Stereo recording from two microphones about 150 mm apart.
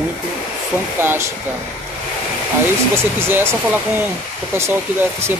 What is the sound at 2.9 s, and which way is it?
Speech, 15° right (ahead or behind).